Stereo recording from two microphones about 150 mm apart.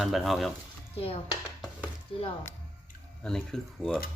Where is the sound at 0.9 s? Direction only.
40° left (ahead or behind).